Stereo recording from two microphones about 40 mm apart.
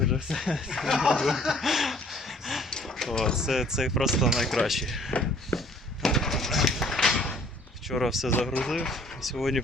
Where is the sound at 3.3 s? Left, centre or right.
Centre.